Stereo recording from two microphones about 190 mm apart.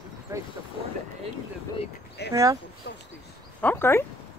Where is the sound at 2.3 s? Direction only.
15° right (ahead or behind).